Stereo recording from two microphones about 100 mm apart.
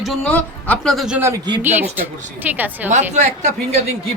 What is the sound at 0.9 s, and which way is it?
Speech, 5° right (ahead or behind).